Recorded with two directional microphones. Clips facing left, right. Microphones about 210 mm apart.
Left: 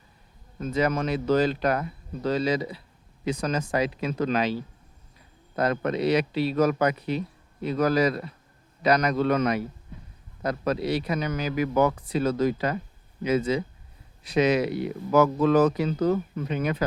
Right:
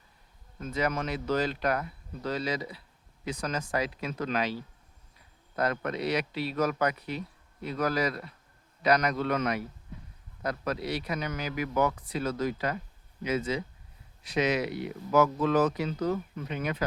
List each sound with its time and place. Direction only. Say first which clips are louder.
0.6 s a man's voice: left 5 dB; 30° left (ahead or behind)
5.5 s a man's voice: left 5 dB; 25° left (ahead or behind)